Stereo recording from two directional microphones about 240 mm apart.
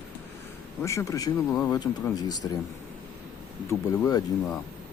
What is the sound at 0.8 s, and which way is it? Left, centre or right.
Speech, centre.